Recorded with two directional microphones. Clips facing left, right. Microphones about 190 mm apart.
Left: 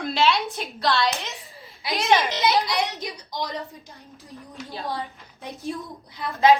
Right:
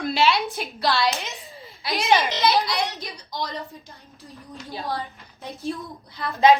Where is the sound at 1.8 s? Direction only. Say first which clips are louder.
Even; 20° left (ahead or behind).